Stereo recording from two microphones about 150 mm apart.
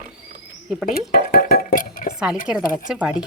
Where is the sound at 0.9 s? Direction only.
90° left; by 2.1 s 70° left (ahead or behind).